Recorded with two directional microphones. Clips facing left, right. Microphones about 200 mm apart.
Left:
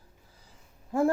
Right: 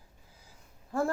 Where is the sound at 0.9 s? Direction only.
20° left (ahead or behind).